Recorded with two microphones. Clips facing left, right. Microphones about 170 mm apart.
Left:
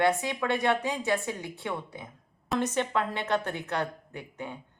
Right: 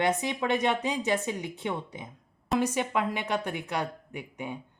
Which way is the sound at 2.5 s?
10° right (ahead or behind).